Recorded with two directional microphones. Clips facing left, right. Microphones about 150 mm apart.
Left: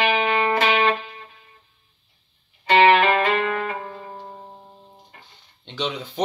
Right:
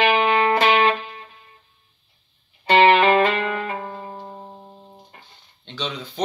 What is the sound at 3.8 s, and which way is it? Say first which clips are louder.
Music: right 2 dB; 45° right (ahead or behind).